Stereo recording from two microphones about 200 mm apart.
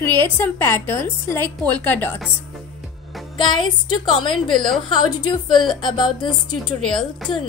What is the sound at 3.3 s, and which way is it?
Speech, 25° left (ahead or behind).